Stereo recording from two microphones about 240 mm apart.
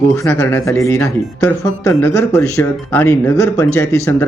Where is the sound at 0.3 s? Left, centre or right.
Centre.